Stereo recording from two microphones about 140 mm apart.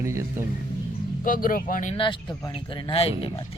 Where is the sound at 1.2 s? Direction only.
80° left.